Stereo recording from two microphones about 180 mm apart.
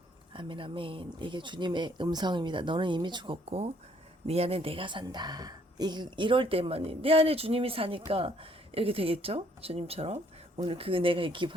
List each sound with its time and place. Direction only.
0.3 s speech: 30° right (ahead or behind)